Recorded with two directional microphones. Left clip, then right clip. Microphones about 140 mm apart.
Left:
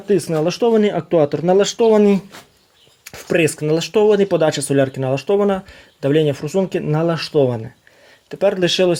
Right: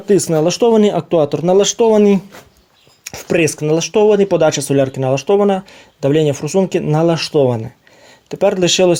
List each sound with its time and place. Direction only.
0.1 s speech: 30° right (ahead or behind)